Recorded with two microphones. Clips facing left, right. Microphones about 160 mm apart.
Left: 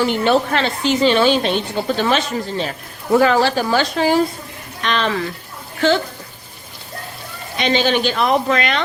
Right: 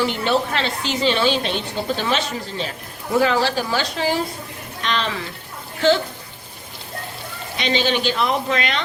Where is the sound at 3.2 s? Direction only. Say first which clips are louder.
Left 2 dB; 55° left (ahead or behind).